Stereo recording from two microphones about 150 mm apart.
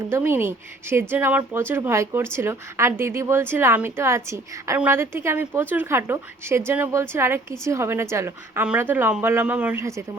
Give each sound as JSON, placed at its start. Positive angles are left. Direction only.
{"t": 0.1, "sound": "speech", "side_deg": -15}